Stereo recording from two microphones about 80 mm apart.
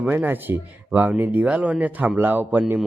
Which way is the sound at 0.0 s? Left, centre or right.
Right.